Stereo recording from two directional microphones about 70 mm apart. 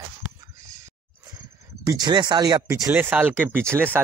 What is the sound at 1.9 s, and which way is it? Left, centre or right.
Speech, right.